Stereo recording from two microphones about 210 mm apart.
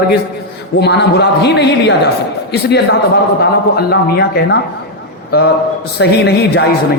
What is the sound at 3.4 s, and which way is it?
A man's voice, 50° left (ahead or behind).